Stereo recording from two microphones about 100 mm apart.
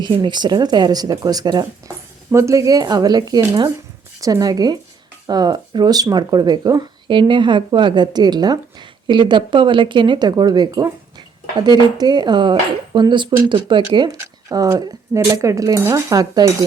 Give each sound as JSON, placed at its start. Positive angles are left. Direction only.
{"t": 0.0, "sound": "speech", "side_deg": -50}
{"t": 2.3, "sound": "speech", "side_deg": -30}
{"t": 7.1, "sound": "speech", "side_deg": -55}